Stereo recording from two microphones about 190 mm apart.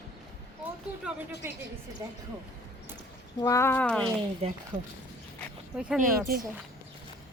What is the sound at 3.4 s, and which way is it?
Speech, 15° left (ahead or behind).